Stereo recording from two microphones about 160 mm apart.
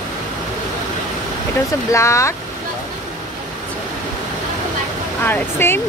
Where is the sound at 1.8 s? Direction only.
20° left (ahead or behind).